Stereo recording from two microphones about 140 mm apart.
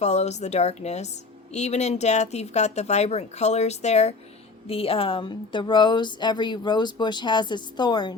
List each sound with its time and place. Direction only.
0.0 s speech: 55° left (ahead or behind); by 8.1 s 30° left (ahead or behind)